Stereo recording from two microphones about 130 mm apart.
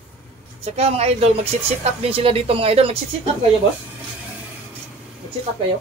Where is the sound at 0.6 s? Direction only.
50° right (ahead or behind).